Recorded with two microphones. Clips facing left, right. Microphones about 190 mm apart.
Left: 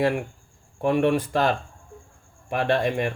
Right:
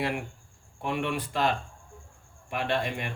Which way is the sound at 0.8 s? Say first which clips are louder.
Left 10 dB; 45° left (ahead or behind).